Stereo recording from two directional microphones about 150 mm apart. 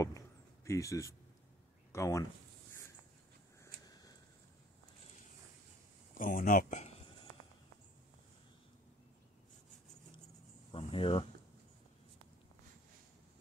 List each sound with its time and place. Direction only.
0.7 s speech: 20° left (ahead or behind)
6.1 s speech: 65° left (ahead or behind)
10.7 s speech: 40° left (ahead or behind)